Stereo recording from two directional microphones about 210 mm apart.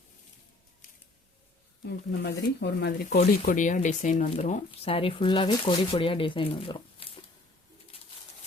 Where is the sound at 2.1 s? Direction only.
55° left (ahead or behind).